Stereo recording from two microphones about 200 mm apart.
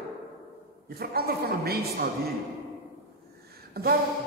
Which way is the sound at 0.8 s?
50° right (ahead or behind).